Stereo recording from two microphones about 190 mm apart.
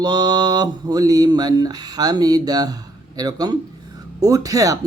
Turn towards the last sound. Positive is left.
turn(degrees=-20)  # may be behind; listen again after turning